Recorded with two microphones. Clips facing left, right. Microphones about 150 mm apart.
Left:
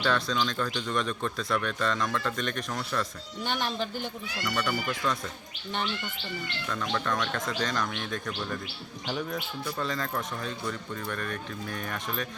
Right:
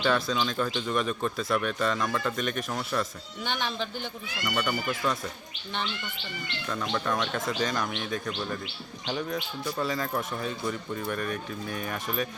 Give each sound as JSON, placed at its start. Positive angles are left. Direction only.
{"t": 0.0, "sound": "speech", "side_deg": -5}
{"t": 3.4, "sound": "speech", "side_deg": 5}
{"t": 4.4, "sound": "speech", "side_deg": -5}
{"t": 6.9, "sound": "speech", "side_deg": -10}